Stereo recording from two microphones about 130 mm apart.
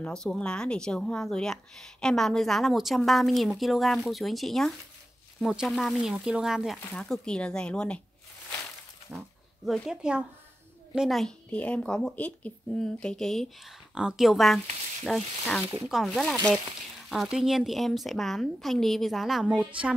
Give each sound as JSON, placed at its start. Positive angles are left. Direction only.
{"t": 0.0, "sound": "speech", "side_deg": 5}
{"t": 9.1, "sound": "speech", "side_deg": -20}
{"t": 9.7, "sound": "speech", "side_deg": -5}